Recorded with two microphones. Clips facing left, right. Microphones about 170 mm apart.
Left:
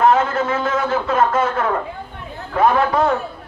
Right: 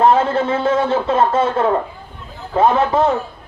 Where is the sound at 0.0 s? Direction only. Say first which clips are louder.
Right 2 dB; 30° right (ahead or behind).